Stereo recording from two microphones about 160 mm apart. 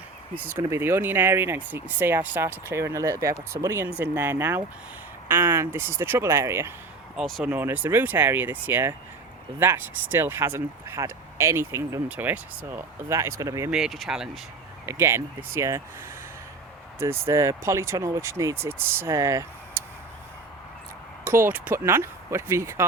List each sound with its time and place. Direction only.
0.3 s speech: 10° right (ahead or behind)
7.2 s speech: centre (ahead or behind)
7.5 s speech: 10° right (ahead or behind)
13.7 s speech: 5° right (ahead or behind)
14.8 s speech: 15° right (ahead or behind)
17.0 s speech: 15° right (ahead or behind)
21.2 s speech: 15° right (ahead or behind)